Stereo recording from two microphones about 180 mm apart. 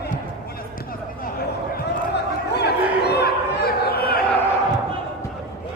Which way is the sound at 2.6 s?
65° left (ahead or behind).